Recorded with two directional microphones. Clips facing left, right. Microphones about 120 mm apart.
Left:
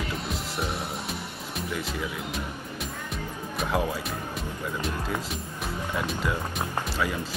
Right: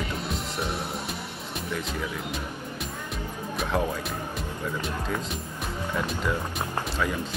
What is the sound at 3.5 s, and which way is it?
Speech, 5° left (ahead or behind).